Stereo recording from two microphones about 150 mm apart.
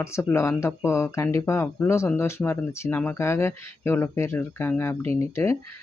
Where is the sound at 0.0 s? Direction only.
15° left (ahead or behind).